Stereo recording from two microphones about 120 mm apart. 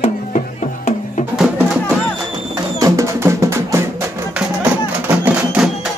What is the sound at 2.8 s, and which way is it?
Music, 25° right (ahead or behind).